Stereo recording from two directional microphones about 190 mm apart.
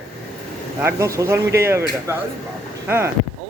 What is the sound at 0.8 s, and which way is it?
Speech, 15° right (ahead or behind).